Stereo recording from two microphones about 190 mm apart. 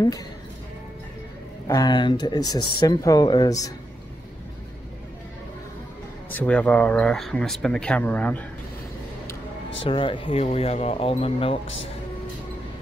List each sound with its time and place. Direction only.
1.7 s speech: 20° left (ahead or behind)
6.3 s speech: 10° left (ahead or behind)
9.8 s speech: 25° left (ahead or behind)